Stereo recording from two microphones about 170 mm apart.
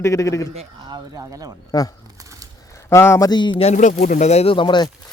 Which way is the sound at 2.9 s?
15° left (ahead or behind).